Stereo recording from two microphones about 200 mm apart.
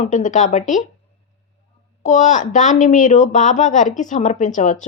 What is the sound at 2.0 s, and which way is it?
Speech, 35° left (ahead or behind).